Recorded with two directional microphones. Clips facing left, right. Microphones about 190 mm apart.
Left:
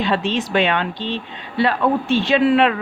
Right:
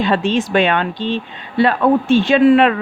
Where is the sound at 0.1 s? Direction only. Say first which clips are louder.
Right 4 dB; 50° right (ahead or behind).